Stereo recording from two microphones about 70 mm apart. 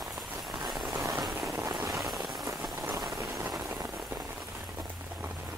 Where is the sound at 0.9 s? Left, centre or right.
Right.